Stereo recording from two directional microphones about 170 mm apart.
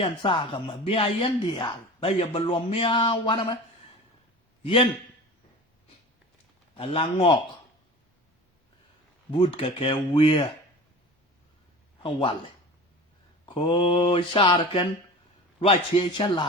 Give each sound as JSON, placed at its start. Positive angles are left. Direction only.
{"t": 0.0, "sound": "speech", "side_deg": 30}
{"t": 4.6, "sound": "speech", "side_deg": 30}
{"t": 6.7, "sound": "speech", "side_deg": 30}
{"t": 9.3, "sound": "speech", "side_deg": 30}
{"t": 12.0, "sound": "speech", "side_deg": 30}
{"t": 13.4, "sound": "speech", "side_deg": 30}